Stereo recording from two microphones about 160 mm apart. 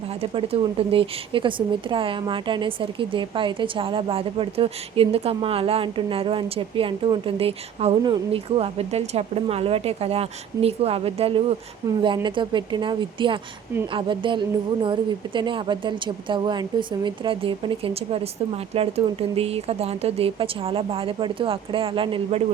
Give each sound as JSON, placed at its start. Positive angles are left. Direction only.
{"t": 0.2, "sound": "a woman's voice", "side_deg": -35}